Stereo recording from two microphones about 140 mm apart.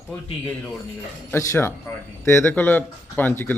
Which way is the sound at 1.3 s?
15° left (ahead or behind).